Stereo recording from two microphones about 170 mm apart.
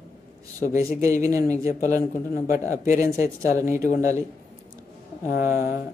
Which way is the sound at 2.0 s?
55° left (ahead or behind).